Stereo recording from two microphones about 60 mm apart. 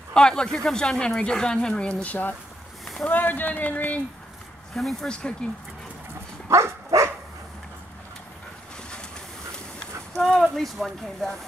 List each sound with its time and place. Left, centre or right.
0.1 s speech: centre
5.0 s speech: centre
6.5 s dog: right
10.1 s a sound: centre
10.5 s speech: centre